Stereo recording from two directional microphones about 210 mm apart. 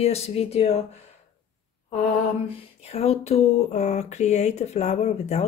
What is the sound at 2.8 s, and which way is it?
Speech, 30° left (ahead or behind).